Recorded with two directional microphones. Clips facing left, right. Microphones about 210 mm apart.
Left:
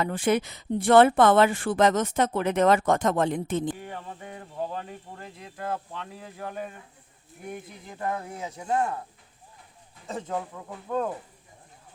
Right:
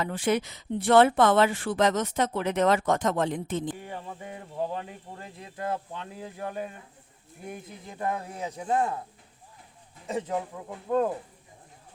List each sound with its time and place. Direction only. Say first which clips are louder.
0.0 s speech: left 2 dB; 50° left (ahead or behind)
3.8 s speech: even; 15° right (ahead or behind)
7.9 s speech: even; 15° right (ahead or behind)
10.1 s speech: right 2 dB; 10° right (ahead or behind)